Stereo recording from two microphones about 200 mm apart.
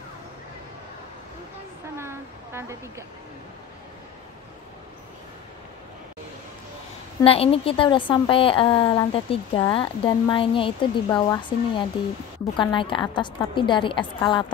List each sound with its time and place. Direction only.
2.0 s speech: 15° right (ahead or behind)
7.2 s a woman's voice: 30° left (ahead or behind)